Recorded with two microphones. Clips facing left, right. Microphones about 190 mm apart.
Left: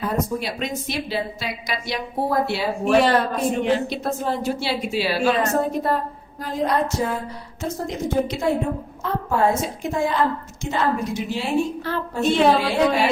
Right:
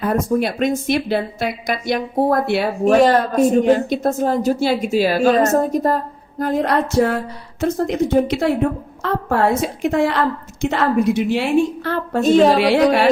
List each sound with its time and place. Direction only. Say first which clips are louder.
0.1 s speech: right 6 dB; 55° right (ahead or behind)
2.8 s speech: right 4 dB; 45° right (ahead or behind)
6.4 s a sound: right 4 dB; 55° right (ahead or behind); by 7.2 s 70° right (ahead or behind)
7.6 s a woman's voice: right 8 dB; 70° right (ahead or behind)
12.2 s a woman's voice: right 6 dB; 40° right (ahead or behind)
12.5 s a woman's voice: right 5 dB; 75° right (ahead or behind)